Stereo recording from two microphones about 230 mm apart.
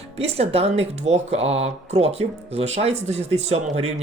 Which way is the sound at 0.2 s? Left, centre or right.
Right.